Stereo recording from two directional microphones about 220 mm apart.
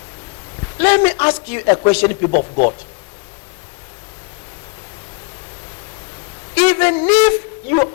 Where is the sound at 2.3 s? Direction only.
40° left (ahead or behind).